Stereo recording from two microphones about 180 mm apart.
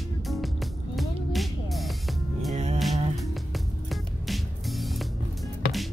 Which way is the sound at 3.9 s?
Centre (ahead or behind).